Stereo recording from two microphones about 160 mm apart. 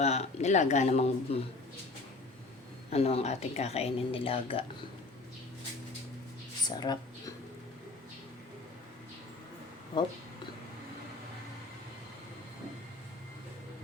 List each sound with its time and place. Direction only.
0.0 s speech: 45° left (ahead or behind)
2.9 s speech: 40° left (ahead or behind)
6.7 s a sound: 25° left (ahead or behind)